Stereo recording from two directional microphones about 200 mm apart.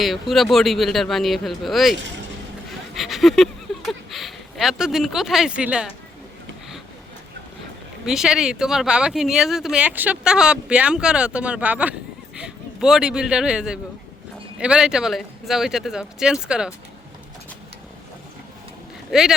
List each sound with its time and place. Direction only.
0.0 s speech: centre (ahead or behind)
2.0 s speech: 65° right (ahead or behind)
2.6 s a sound: centre (ahead or behind)
8.0 s speech: centre (ahead or behind)
19.1 s speech: centre (ahead or behind)